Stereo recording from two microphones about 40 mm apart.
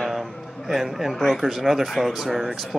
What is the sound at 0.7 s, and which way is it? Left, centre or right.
Speech, centre.